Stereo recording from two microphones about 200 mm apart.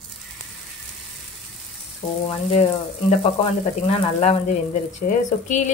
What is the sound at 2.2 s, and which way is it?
A woman's voice, 30° left (ahead or behind).